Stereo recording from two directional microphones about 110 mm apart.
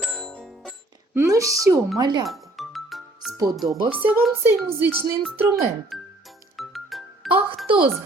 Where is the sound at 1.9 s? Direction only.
40° right (ahead or behind).